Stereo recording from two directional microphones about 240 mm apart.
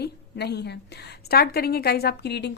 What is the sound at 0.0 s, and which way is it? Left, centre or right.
A woman's voice, left.